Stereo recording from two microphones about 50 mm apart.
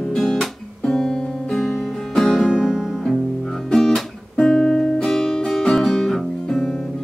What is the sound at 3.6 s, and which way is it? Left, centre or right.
Guitar, centre.